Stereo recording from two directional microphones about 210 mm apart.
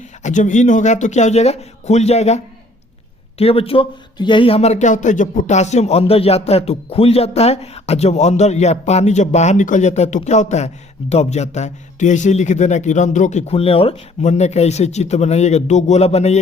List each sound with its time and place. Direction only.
0.2 s speech: 35° left (ahead or behind)